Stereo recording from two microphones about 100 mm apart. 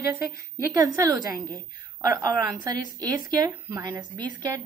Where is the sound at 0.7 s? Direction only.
35° right (ahead or behind).